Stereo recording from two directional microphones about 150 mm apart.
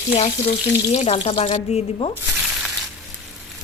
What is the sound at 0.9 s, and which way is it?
A woman's voice, 45° left (ahead or behind).